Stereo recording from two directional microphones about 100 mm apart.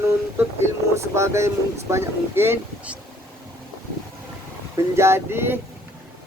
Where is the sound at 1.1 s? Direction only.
30° right (ahead or behind).